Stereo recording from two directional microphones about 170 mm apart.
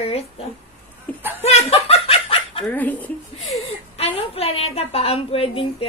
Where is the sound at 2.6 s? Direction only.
10° left (ahead or behind).